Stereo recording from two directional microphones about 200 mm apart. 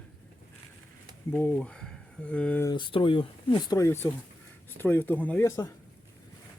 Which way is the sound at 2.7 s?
25° left (ahead or behind).